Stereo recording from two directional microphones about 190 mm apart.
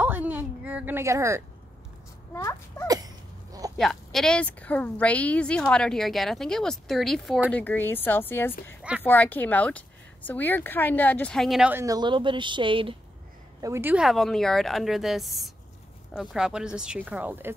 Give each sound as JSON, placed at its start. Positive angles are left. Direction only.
{"t": 0.0, "sound": "a sound", "side_deg": -10}
{"t": 2.3, "sound": "speech", "side_deg": 15}
{"t": 3.7, "sound": "a woman's voice", "side_deg": 0}
{"t": 7.5, "sound": "speech", "side_deg": 10}
{"t": 11.8, "sound": "speech", "side_deg": -20}
{"t": 13.6, "sound": "a woman's voice", "side_deg": -15}